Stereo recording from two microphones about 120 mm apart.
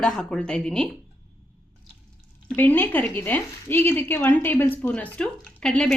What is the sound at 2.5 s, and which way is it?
Speech, 15° left (ahead or behind).